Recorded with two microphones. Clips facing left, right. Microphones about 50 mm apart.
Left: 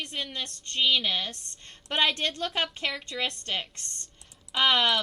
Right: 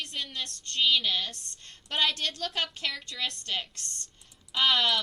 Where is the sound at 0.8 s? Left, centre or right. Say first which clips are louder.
Left 1 dB; centre.